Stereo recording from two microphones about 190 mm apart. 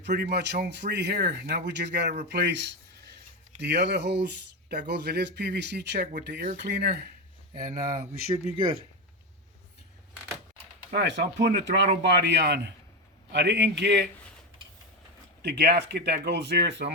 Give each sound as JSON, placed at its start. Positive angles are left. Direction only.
{"t": 0.0, "sound": "speech", "side_deg": -60}
{"t": 7.7, "sound": "speech", "side_deg": -45}
{"t": 8.3, "sound": "speech", "side_deg": -25}
{"t": 10.9, "sound": "speech", "side_deg": -65}
{"t": 15.4, "sound": "speech", "side_deg": -60}